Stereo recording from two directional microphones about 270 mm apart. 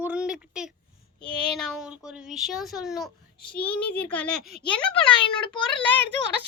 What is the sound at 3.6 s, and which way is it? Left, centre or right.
Speech, centre.